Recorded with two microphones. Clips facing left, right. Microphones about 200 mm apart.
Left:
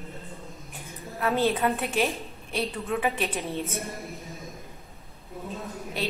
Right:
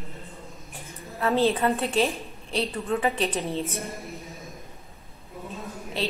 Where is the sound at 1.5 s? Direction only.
5° left (ahead or behind).